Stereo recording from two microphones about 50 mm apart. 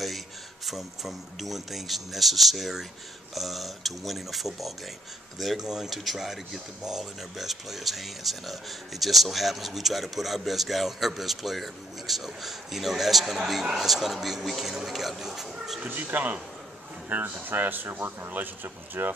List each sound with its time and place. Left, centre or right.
0.7 s speech: centre
15.9 s speech: right